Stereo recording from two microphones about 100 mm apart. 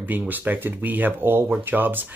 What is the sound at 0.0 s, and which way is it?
Speech, 15° right (ahead or behind).